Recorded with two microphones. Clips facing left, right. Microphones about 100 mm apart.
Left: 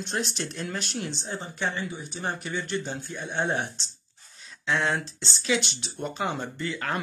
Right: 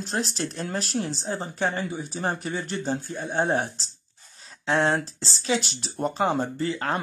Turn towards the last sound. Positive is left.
turn(degrees=-30)  # may be behind; listen again after turning